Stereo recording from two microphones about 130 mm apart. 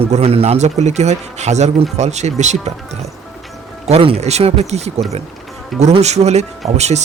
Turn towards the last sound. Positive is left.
turn(degrees=-60)  # may be behind; listen again after turning